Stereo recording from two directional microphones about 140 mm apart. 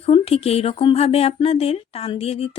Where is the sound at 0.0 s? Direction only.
45° left (ahead or behind).